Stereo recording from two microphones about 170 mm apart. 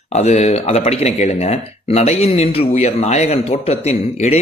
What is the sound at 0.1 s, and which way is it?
Speech, 40° left (ahead or behind).